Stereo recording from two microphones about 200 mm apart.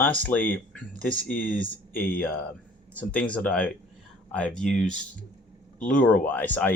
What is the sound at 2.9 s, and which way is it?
Speech, 5° left (ahead or behind).